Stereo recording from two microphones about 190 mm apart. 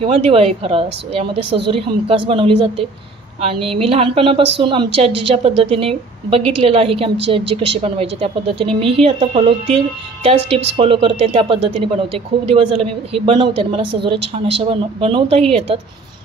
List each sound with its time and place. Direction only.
0.0 s a woman's voice: 30° right (ahead or behind)